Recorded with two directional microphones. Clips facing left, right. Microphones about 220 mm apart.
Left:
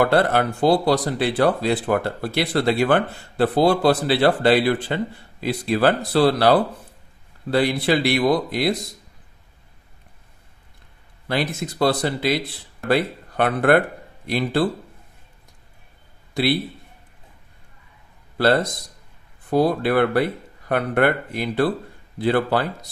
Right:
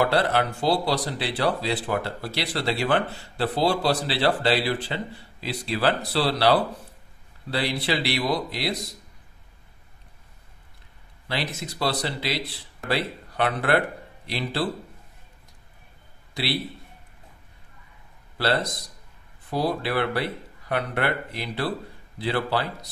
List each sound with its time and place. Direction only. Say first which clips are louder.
0.0 s speech: left 4 dB; 50° left (ahead or behind)
11.2 s speech: left 6 dB; 50° left (ahead or behind)
16.4 s a man's voice: left 9 dB; 50° left (ahead or behind)
18.4 s speech: left 6 dB; 50° left (ahead or behind)